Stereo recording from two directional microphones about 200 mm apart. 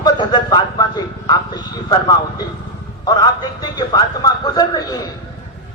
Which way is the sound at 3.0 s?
20° left (ahead or behind).